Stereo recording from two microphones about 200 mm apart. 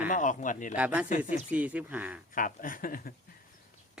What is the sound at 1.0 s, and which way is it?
Speech, 40° left (ahead or behind).